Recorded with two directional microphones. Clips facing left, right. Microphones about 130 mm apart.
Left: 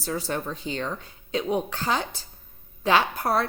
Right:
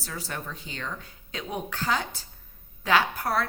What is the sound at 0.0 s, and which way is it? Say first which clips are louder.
A woman's voice: left 7 dB; 25° left (ahead or behind).